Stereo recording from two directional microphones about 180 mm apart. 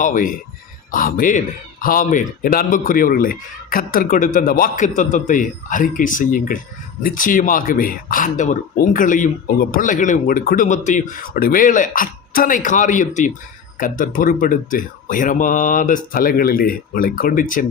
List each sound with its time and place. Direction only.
0.0 s speech: 45° left (ahead or behind)